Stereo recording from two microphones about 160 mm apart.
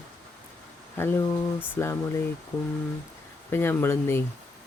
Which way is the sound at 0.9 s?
15° left (ahead or behind).